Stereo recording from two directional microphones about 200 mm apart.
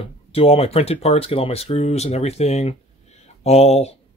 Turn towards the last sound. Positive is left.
turn(degrees=30)  # may be behind; listen again after turning